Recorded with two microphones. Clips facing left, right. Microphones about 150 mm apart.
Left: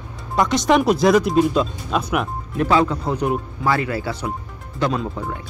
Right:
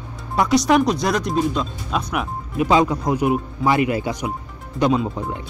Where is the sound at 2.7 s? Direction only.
15° right (ahead or behind).